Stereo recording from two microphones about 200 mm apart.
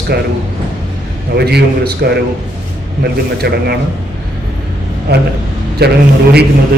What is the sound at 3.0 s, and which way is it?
Speech, 55° right (ahead or behind).